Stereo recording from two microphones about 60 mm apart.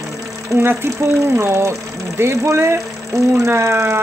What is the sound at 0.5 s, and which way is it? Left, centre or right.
Speech, right.